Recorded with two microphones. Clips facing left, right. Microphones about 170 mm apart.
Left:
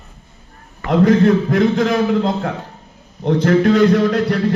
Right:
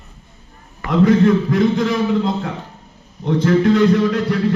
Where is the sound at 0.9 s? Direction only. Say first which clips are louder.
Left 1 dB; 50° left (ahead or behind).